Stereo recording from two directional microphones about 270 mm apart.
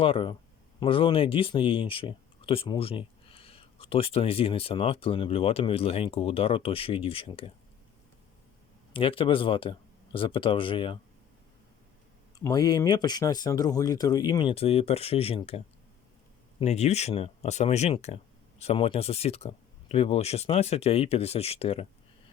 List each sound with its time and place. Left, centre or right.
0.0 s speech: centre
8.9 s speech: centre
12.4 s speech: centre